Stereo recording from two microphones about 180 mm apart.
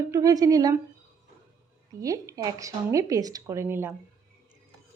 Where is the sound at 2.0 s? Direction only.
20° right (ahead or behind).